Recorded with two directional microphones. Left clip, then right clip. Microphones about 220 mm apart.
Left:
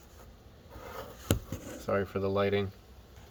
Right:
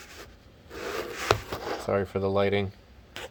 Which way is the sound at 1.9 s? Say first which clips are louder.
Right 3 dB; 20° right (ahead or behind).